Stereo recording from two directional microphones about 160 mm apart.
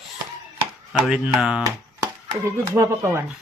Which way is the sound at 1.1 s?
5° right (ahead or behind).